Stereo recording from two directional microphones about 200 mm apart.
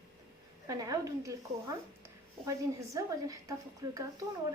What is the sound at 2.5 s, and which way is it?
Speech, 15° right (ahead or behind).